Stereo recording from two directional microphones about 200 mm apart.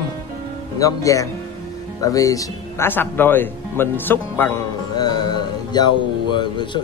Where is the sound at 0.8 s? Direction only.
15° left (ahead or behind).